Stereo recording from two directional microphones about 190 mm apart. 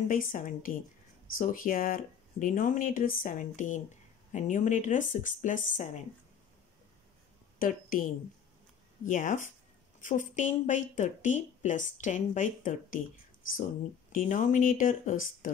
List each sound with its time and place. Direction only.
0.1 s speech: 45° left (ahead or behind)
7.5 s a woman's voice: 45° left (ahead or behind)
14.1 s speech: 40° left (ahead or behind)